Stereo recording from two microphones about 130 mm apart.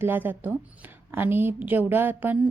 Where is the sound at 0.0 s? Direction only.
15° right (ahead or behind).